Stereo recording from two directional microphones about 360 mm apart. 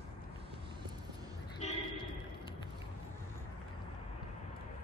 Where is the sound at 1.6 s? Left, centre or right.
Centre.